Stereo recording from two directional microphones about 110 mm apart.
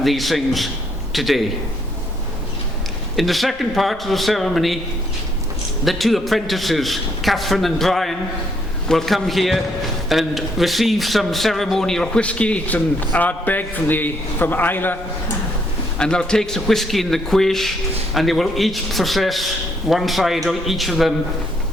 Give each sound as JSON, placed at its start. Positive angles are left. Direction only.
{"t": 0.0, "sound": "a man's voice", "side_deg": 0}
{"t": 3.2, "sound": "a man's voice", "side_deg": 0}
{"t": 5.8, "sound": "a man's voice", "side_deg": 0}
{"t": 16.0, "sound": "a man's voice", "side_deg": 5}